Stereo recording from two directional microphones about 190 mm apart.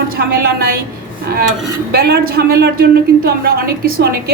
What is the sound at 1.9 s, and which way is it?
A woman's voice, 55° right (ahead or behind).